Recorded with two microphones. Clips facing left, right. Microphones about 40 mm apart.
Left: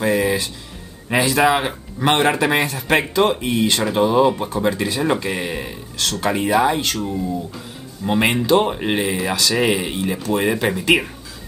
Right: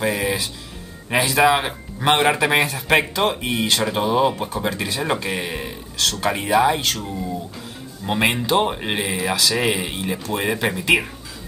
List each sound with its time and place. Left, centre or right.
0.0 s speech: centre
3.3 s speech: right
3.7 s speech: centre
4.3 s speech: centre
5.0 s speech: centre